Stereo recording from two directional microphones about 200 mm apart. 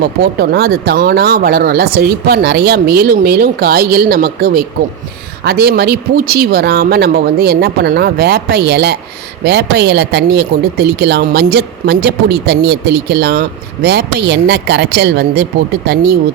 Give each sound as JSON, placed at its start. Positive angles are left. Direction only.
{"t": 0.0, "sound": "speech", "side_deg": -55}